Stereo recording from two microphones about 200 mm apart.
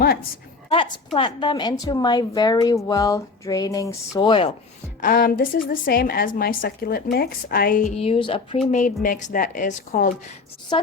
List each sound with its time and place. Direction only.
0.7 s speech: 25° left (ahead or behind)
4.9 s a woman's voice: 45° left (ahead or behind); by 8.4 s 30° left (ahead or behind)
8.7 s a woman's voice: 40° left (ahead or behind)
10.7 s speech: 25° left (ahead or behind)